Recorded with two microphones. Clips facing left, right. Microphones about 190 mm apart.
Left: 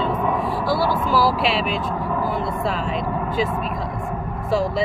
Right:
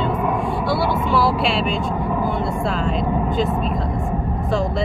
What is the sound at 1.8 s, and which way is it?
Speech, 20° right (ahead or behind).